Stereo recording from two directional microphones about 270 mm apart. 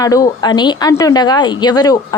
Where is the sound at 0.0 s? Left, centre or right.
Centre.